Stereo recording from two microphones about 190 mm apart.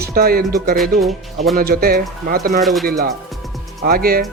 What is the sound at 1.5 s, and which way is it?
Speech, 50° right (ahead or behind).